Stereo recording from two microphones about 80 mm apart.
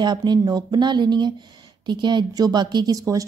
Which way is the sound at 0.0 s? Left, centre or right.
Right.